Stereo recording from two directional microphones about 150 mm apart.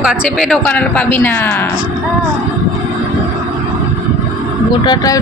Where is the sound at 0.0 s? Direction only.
Centre (ahead or behind).